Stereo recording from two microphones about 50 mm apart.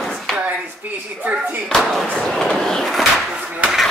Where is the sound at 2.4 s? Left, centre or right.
Centre.